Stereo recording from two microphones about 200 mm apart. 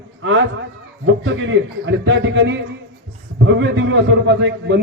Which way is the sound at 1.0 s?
70° right (ahead or behind).